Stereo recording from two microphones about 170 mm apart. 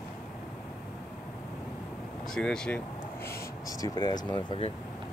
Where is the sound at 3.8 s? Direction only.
25° left (ahead or behind).